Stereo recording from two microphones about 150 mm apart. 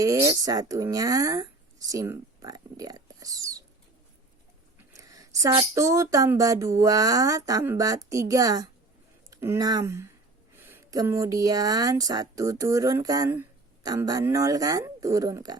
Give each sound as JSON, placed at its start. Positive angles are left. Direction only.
{"t": 0.0, "sound": "speech", "side_deg": -20}
{"t": 4.9, "sound": "a sound", "side_deg": -25}
{"t": 5.7, "sound": "speech", "side_deg": -20}